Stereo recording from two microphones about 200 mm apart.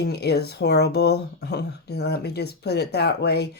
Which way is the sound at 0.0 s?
55° left (ahead or behind).